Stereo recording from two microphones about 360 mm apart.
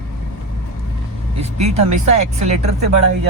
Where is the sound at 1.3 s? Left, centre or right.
Centre.